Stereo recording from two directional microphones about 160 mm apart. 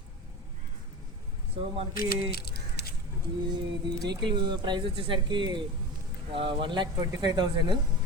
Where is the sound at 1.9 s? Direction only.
70° left (ahead or behind); by 2.9 s 90° left.